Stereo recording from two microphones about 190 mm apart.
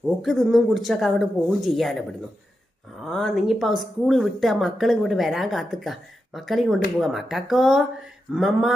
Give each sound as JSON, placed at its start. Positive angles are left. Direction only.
{"t": 0.2, "sound": "speech", "side_deg": 0}